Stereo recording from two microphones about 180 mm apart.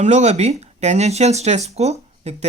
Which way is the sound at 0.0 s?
40° right (ahead or behind).